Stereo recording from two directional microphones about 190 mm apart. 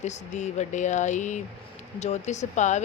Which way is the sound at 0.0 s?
35° left (ahead or behind).